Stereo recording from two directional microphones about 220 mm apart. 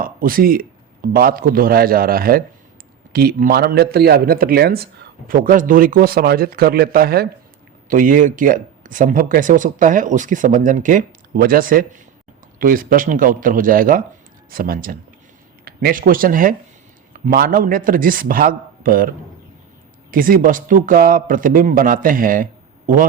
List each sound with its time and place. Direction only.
0.0 s a man's voice: 40° right (ahead or behind)